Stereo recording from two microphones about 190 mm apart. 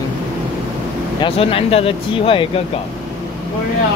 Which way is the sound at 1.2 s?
30° left (ahead or behind).